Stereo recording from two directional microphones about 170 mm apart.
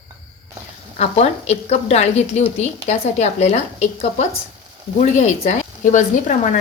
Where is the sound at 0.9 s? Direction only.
40° left (ahead or behind).